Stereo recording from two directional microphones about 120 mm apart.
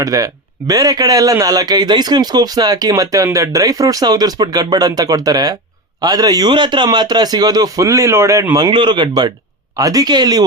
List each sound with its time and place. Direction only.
0.0 s a man's voice: 30° right (ahead or behind)